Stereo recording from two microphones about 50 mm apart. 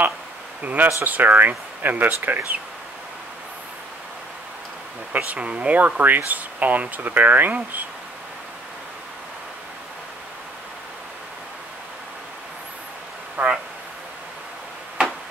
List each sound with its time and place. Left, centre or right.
0.7 s speech: right
5.1 s speech: right
13.4 s a sound: right